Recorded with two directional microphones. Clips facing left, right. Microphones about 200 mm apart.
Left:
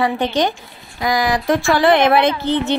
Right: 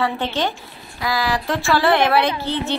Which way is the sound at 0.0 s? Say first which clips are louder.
Left 4 dB; 15° left (ahead or behind).